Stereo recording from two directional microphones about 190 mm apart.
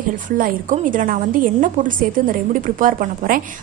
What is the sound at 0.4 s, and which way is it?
A woman's voice, 45° right (ahead or behind).